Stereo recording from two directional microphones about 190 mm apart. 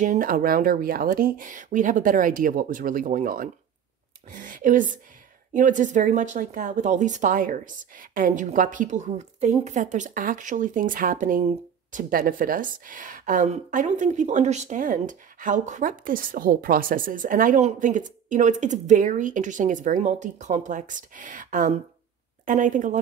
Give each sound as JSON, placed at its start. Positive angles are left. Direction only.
{"t": 0.0, "sound": "speech", "side_deg": -45}